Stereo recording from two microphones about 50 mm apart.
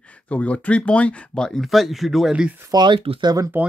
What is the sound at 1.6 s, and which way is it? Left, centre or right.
Speech, centre.